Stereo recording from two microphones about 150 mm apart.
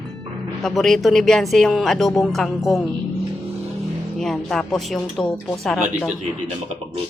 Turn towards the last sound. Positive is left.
turn(degrees=-5)  # may be behind; listen again after turning